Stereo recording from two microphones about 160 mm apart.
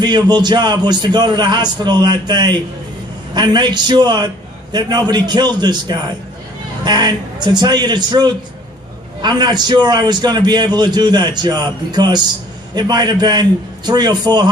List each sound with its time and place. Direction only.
0.0 s a man's voice: 25° right (ahead or behind)